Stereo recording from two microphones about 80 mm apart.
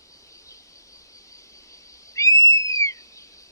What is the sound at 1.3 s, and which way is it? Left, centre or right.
Owl, left.